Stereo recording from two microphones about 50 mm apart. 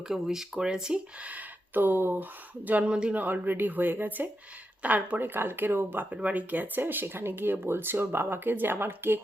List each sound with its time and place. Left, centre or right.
0.1 s speech: centre
1.2 s speech: right
2.8 s speech: right
3.2 s speech: right
6.1 s speech: right